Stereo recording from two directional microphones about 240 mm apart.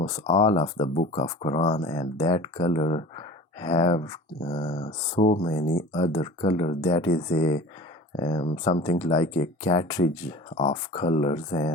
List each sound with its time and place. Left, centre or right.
0.3 s speech: left